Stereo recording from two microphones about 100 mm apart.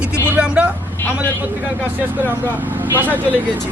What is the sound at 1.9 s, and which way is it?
Speech, 20° right (ahead or behind).